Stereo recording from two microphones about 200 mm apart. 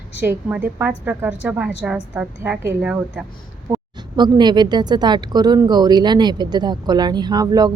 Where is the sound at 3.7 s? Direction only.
20° right (ahead or behind).